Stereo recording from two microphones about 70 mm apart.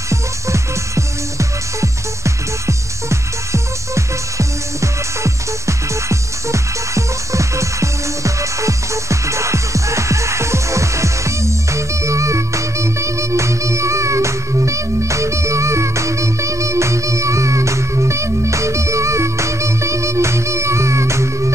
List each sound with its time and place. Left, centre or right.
0.1 s music: right